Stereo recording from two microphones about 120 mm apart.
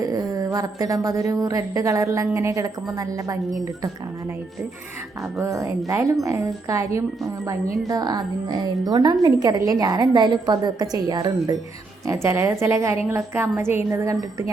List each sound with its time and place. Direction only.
0.0 s speech: 30° right (ahead or behind)
5.4 s a woman's voice: 25° right (ahead or behind)